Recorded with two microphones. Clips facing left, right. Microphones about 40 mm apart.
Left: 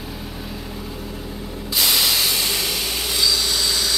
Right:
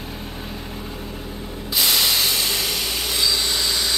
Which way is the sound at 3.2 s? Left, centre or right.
Centre.